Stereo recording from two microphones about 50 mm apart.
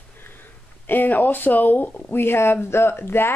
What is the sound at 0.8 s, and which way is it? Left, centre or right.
Speech, left.